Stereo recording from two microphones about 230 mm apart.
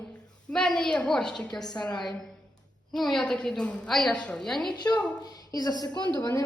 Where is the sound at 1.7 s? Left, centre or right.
Centre.